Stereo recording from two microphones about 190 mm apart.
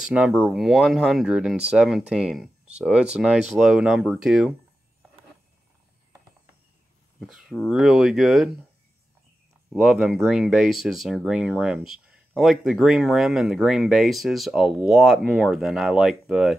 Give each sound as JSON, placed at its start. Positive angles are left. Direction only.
{"t": 0.4, "sound": "speech", "side_deg": 0}
{"t": 7.2, "sound": "speech", "side_deg": -5}
{"t": 9.7, "sound": "speech", "side_deg": 0}